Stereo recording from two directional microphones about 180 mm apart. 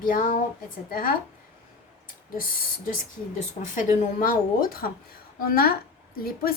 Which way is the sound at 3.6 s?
45° left (ahead or behind).